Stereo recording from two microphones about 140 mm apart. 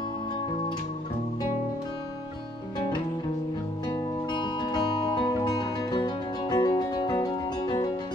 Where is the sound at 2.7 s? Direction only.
30° left (ahead or behind).